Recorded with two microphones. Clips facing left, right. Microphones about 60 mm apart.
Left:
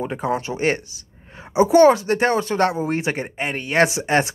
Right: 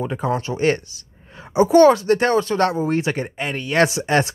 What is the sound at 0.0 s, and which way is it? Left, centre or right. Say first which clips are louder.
A woman's voice: right 1 dB; left.